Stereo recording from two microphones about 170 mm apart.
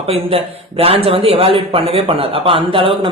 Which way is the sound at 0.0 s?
35° right (ahead or behind).